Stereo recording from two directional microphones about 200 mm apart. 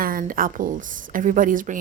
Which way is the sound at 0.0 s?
45° right (ahead or behind).